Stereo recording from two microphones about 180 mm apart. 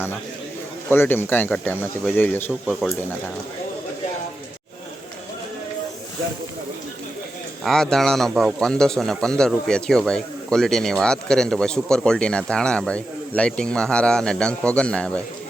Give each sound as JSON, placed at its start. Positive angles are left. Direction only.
{"t": 0.9, "sound": "speech", "side_deg": 10}
{"t": 7.6, "sound": "a man's voice", "side_deg": 5}